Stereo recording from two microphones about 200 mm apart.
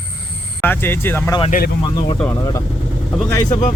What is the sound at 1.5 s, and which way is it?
Speech, 45° left (ahead or behind).